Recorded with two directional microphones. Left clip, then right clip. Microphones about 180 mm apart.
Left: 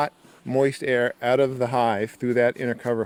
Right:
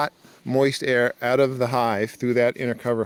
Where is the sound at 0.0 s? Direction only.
30° right (ahead or behind).